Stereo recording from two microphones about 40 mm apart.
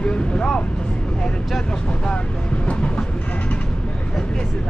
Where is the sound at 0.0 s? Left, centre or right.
Left.